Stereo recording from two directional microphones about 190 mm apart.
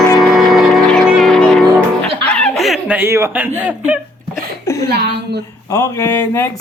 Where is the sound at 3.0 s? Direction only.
15° right (ahead or behind).